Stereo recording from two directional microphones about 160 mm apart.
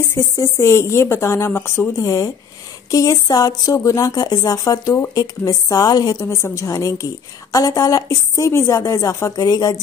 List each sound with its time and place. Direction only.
0.1 s speech: 15° left (ahead or behind)